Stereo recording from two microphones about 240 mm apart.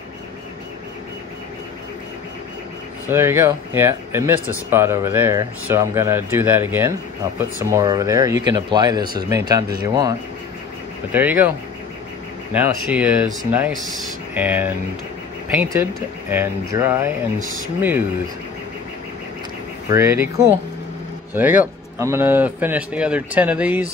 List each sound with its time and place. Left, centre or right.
3.1 s speech: centre
11.1 s speech: centre
12.5 s speech: centre
17.4 s speech: right
19.9 s speech: centre